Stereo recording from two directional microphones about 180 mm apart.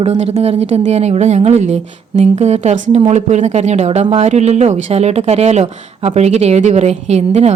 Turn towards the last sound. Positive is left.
turn(degrees=-35)  # may be behind; listen again after turning